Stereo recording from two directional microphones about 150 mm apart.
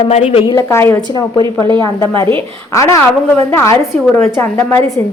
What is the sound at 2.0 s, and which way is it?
A woman's voice, 15° left (ahead or behind).